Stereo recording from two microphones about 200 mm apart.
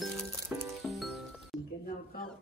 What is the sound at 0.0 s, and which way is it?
Music, centre (ahead or behind).